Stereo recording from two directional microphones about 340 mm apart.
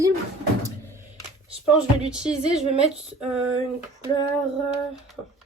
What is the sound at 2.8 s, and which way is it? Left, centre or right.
Female singing, centre.